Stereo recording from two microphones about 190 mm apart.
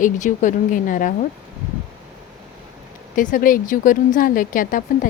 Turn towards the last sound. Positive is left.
turn(degrees=45)  # may be behind; listen again after turning